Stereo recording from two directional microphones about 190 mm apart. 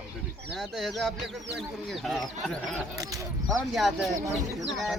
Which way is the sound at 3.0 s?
15° right (ahead or behind).